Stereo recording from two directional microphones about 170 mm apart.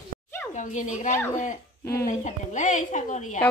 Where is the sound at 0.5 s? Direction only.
45° left (ahead or behind).